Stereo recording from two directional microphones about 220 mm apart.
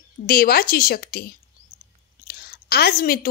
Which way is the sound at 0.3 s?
45° left (ahead or behind).